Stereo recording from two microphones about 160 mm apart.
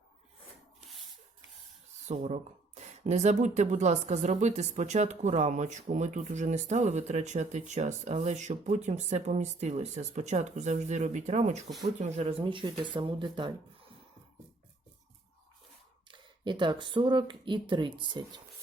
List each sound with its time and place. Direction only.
0.8 s rub: centre (ahead or behind)
2.0 s speech: 45° right (ahead or behind)
12.4 s speech: 30° right (ahead or behind)
16.0 s speech: 30° right (ahead or behind)